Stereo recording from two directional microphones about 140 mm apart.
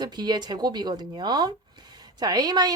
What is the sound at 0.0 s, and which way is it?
A woman's voice, 30° right (ahead or behind).